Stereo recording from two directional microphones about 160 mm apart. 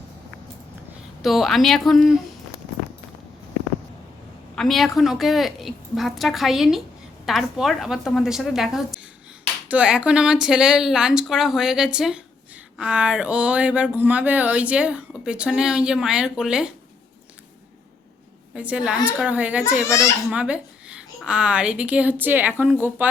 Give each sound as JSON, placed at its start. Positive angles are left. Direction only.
{"t": 1.2, "sound": "speech", "side_deg": 0}
{"t": 4.5, "sound": "speech", "side_deg": 0}
{"t": 18.5, "sound": "speech", "side_deg": -10}
{"t": 19.8, "sound": "a child's voice", "side_deg": 20}
{"t": 20.3, "sound": "speech", "side_deg": -5}